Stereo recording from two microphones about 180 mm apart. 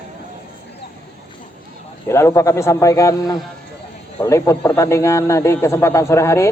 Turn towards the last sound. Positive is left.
turn(degrees=15)  # may be behind; listen again after turning